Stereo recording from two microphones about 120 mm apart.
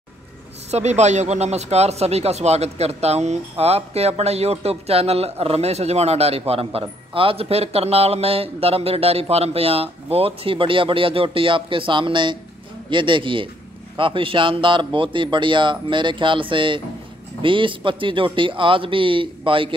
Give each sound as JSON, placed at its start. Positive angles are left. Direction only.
{"t": 0.7, "sound": "a man's voice", "side_deg": -65}